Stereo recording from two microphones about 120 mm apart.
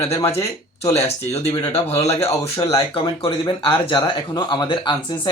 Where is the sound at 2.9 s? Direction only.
45° left (ahead or behind).